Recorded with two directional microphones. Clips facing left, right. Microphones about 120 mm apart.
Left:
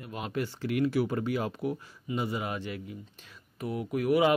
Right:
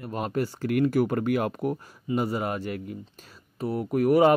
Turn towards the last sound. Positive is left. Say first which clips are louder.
# right 5 dB
turn(degrees=-40)  # may be behind; listen again after turning